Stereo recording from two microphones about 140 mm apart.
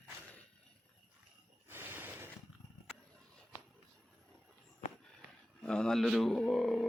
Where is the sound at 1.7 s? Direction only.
15° right (ahead or behind).